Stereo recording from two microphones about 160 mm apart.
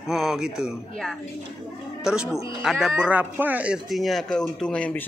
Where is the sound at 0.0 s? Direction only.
Centre (ahead or behind).